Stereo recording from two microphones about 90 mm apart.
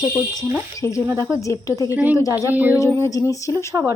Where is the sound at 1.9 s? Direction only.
20° right (ahead or behind).